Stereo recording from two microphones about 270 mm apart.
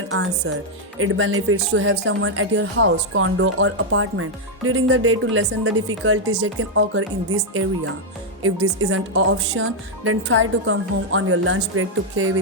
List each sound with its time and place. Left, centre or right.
0.1 s speech: right